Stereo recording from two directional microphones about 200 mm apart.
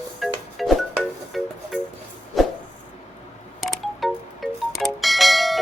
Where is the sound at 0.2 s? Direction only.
Centre (ahead or behind).